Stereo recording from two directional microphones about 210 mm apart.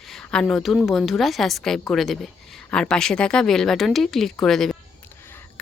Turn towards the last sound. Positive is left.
turn(degrees=10)  # may be behind; listen again after turning